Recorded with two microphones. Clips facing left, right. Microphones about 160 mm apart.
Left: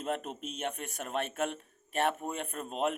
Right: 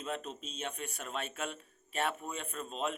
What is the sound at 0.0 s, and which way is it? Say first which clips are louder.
A man's voice: left 4 dB; 55° left (ahead or behind).